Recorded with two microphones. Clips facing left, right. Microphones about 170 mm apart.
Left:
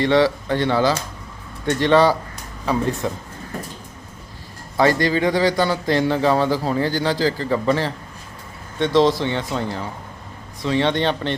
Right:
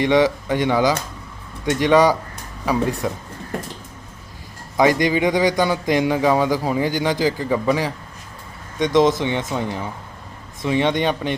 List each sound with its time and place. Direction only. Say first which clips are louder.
0.0 s a man's voice: even; 15° right (ahead or behind)
4.8 s a man's voice: right 1 dB; 15° right (ahead or behind)